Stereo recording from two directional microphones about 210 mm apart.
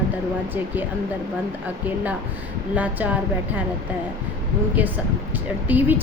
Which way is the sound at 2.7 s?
5° right (ahead or behind).